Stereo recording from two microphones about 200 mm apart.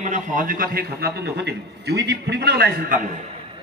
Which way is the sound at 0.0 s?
40° right (ahead or behind).